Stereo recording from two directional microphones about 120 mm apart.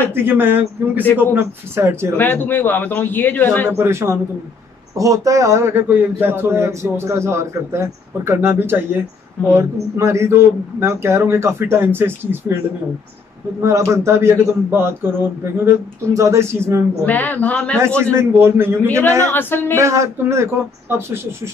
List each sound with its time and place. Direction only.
0.1 s a man's voice: 20° right (ahead or behind)
2.1 s a man's voice: 15° left (ahead or behind)
3.7 s a man's voice: 20° right (ahead or behind)
13.6 s a man's voice: 25° right (ahead or behind)
17.0 s a man's voice: 15° left (ahead or behind)
17.7 s a man's voice: 20° right (ahead or behind)
19.3 s a man's voice: 15° left (ahead or behind)
19.8 s a man's voice: 25° right (ahead or behind)